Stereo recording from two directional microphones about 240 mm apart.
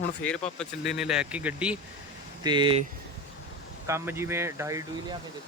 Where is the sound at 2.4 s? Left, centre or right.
Centre.